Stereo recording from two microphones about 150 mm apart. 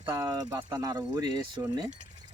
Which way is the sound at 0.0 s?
20° right (ahead or behind).